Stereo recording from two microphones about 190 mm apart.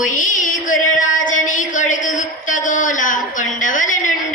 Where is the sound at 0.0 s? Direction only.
45° left (ahead or behind).